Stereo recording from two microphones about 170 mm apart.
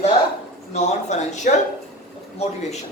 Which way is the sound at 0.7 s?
40° left (ahead or behind).